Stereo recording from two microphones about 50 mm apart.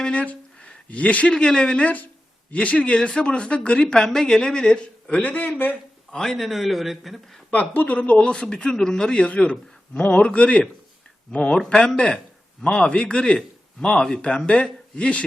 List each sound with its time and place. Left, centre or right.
0.0 s a sound: left
1.3 s a man's voice: centre
5.1 s speech: left
6.3 s a man's voice: centre
7.7 s speech: left
8.1 s a man's voice: left